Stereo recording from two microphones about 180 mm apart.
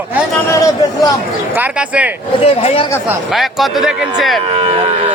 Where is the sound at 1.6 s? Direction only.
10° right (ahead or behind).